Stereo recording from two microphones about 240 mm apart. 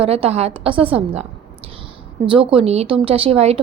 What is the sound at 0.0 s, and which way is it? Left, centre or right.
A woman's voice, right.